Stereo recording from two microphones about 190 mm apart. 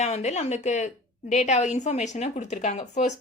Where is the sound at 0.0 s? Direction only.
35° left (ahead or behind).